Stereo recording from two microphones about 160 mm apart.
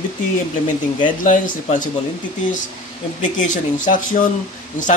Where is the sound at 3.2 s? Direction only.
50° left (ahead or behind).